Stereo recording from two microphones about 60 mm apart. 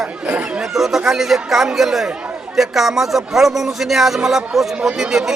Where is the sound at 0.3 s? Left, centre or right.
Right.